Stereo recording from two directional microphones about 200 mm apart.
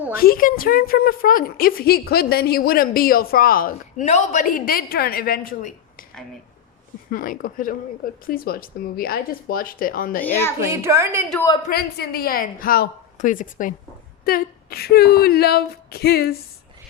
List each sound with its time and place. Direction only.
0.2 s a woman's voice: 45° left (ahead or behind)
7.1 s a woman's voice: 45° left (ahead or behind)
10.6 s a woman's voice: 15° right (ahead or behind)
11.7 s a woman's voice: 50° left (ahead or behind)